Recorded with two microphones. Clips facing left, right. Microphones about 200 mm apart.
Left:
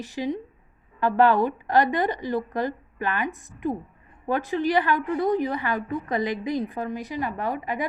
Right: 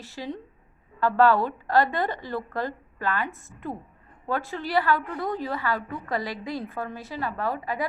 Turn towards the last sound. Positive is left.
turn(degrees=20)  # may be behind; listen again after turning